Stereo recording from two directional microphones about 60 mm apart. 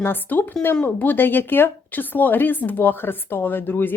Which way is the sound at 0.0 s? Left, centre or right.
Left.